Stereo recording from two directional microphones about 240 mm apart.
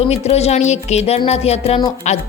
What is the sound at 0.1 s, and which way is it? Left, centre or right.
Speech, left.